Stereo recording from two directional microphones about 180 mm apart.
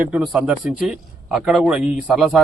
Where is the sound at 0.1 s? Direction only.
5° right (ahead or behind).